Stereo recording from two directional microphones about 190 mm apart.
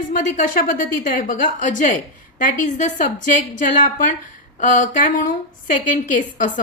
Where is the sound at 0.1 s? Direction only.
45° left (ahead or behind).